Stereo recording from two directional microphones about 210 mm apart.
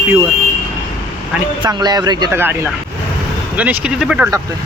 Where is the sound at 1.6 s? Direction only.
20° right (ahead or behind); by 4.3 s 5° right (ahead or behind).